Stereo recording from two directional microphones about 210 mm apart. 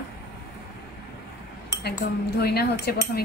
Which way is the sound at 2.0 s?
50° left (ahead or behind).